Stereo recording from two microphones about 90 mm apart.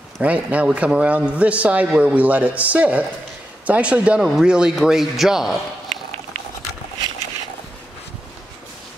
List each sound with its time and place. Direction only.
0.2 s a man's voice: 15° right (ahead or behind)